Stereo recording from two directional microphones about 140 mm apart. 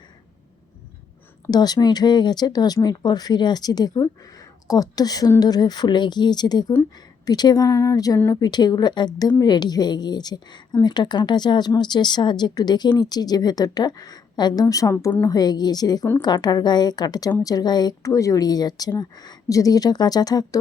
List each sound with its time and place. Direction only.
1.5 s a woman's voice: 30° left (ahead or behind)